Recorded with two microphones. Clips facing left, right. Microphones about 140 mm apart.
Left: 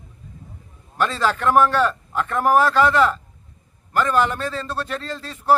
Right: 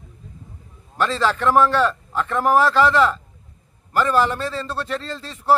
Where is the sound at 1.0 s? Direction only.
Centre (ahead or behind).